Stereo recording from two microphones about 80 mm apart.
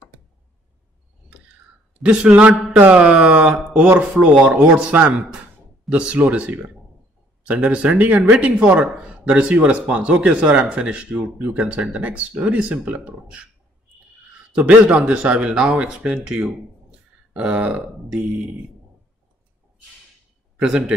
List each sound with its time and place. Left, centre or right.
2.0 s speech: centre
14.5 s speech: centre